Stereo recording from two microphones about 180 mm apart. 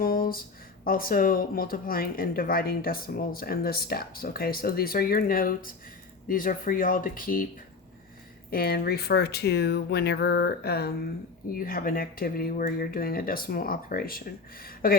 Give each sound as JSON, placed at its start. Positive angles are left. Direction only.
{"t": 0.0, "sound": "a sound", "side_deg": 55}
{"t": 0.9, "sound": "speech", "side_deg": 50}
{"t": 8.4, "sound": "speech", "side_deg": 55}
{"t": 11.5, "sound": "speech", "side_deg": 50}